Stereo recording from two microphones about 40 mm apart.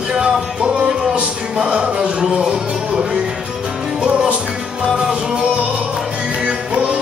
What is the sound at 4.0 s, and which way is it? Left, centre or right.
Music, right.